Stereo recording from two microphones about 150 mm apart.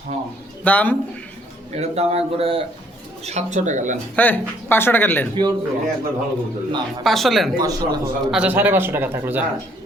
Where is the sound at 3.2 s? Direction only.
50° right (ahead or behind).